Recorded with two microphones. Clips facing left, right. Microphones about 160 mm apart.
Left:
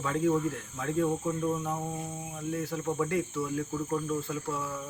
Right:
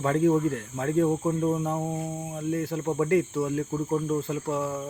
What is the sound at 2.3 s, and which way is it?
Speech, 45° right (ahead or behind).